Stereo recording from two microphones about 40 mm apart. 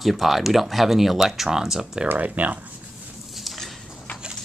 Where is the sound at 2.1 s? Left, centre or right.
Right.